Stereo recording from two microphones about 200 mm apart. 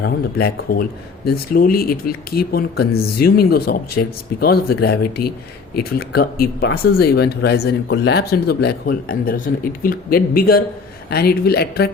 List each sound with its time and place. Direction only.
0.0 s speech: 50° left (ahead or behind)